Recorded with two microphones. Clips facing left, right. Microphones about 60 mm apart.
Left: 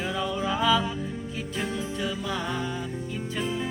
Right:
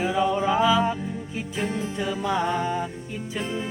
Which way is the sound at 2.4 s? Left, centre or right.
Right.